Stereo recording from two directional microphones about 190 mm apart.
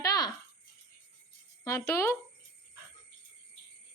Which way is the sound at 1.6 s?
15° left (ahead or behind).